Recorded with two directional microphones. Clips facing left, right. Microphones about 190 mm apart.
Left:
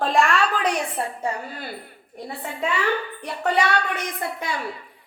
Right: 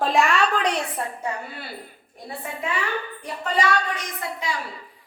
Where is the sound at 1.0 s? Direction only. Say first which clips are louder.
Left 2 dB; 30° left (ahead or behind).